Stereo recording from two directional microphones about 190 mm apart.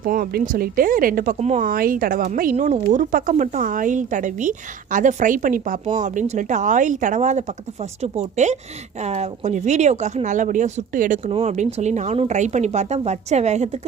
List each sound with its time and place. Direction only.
0.0 s speech: 50° right (ahead or behind)